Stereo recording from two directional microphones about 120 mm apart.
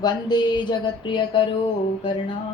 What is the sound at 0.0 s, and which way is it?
Speech, 35° left (ahead or behind).